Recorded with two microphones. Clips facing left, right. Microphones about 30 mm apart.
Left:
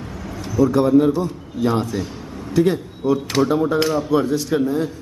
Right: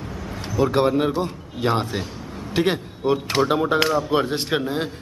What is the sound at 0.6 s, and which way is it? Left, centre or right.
A man's voice, right.